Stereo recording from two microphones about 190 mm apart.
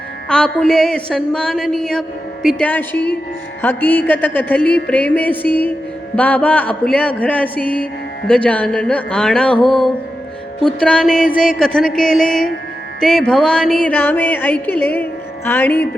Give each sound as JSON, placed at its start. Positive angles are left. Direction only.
{"t": 0.3, "sound": "a woman's voice", "side_deg": 5}
{"t": 3.6, "sound": "music", "side_deg": 10}
{"t": 8.3, "sound": "a woman's voice", "side_deg": 5}
{"t": 13.0, "sound": "music", "side_deg": 0}